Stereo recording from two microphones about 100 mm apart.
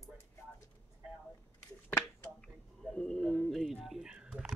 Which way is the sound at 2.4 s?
5° left (ahead or behind).